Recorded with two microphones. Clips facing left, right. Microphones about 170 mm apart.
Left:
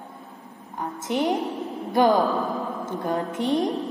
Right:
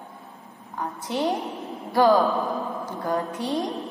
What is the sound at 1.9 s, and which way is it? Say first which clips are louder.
Speech: right 1 dB; 20° left (ahead or behind).